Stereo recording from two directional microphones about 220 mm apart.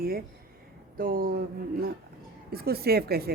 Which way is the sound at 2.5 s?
45° right (ahead or behind).